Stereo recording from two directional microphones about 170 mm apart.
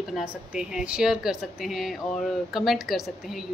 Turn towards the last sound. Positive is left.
turn(degrees=0)  # may be behind; listen again after turning